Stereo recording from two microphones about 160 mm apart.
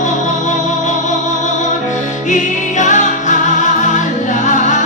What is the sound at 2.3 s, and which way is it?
Music, 50° left (ahead or behind).